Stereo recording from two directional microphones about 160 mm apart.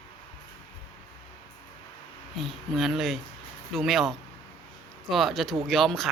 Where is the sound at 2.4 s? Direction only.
Centre (ahead or behind).